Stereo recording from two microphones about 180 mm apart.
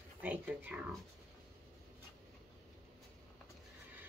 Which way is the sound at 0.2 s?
10° right (ahead or behind).